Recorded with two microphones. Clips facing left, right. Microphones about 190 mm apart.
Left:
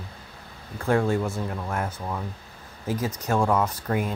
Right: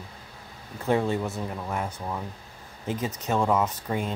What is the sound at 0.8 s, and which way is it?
Speech, centre (ahead or behind).